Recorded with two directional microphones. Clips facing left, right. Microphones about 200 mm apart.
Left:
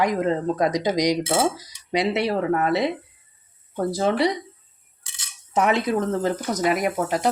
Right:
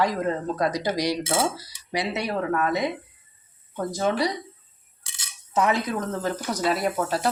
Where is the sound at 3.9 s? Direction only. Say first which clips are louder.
Left 3 dB; 25° left (ahead or behind).